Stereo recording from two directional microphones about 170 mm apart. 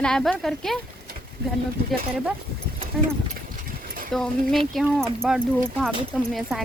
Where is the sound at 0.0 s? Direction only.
5° left (ahead or behind).